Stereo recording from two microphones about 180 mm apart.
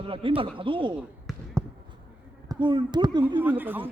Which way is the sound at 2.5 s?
25° right (ahead or behind).